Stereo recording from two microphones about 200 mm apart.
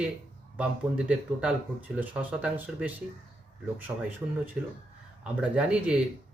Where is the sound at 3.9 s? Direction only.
15° right (ahead or behind).